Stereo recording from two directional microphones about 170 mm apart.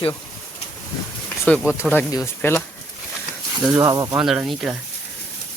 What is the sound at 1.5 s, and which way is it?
Speech, 10° left (ahead or behind).